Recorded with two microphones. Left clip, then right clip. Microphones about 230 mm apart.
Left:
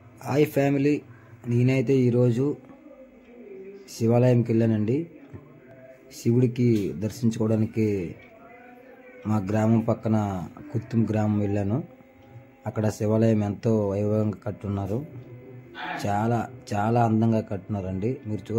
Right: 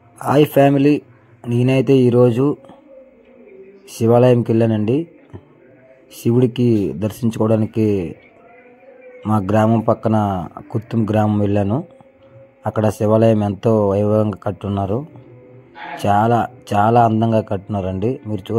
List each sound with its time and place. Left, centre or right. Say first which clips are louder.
0.2 s speech: right 10 dB; right
3.9 s speech: right 10 dB; right
6.1 s speech: right 8 dB; centre
9.2 s speech: right 10 dB; right
12.6 s speech: right 10 dB; centre